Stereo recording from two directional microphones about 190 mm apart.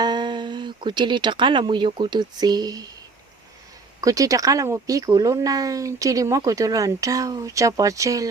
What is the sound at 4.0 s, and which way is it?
Speech, 15° right (ahead or behind).